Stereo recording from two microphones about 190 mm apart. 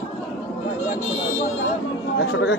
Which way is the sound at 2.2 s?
65° left (ahead or behind).